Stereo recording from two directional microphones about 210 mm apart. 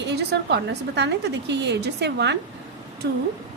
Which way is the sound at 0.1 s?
50° right (ahead or behind).